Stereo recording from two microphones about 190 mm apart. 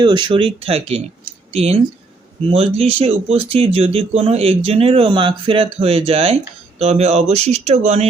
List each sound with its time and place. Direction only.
0.0 s speech: 25° right (ahead or behind)